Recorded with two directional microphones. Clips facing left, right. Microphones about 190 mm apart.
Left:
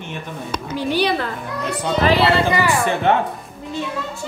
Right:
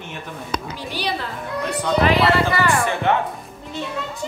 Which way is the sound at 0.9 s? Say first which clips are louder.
Left 7 dB; 60° left (ahead or behind).